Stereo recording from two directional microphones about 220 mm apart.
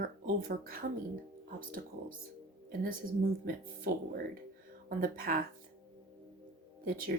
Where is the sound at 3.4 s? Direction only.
40° right (ahead or behind).